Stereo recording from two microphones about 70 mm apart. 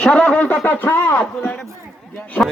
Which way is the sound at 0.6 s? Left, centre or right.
Left.